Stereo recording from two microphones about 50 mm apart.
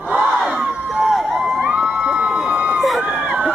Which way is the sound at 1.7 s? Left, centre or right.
Centre.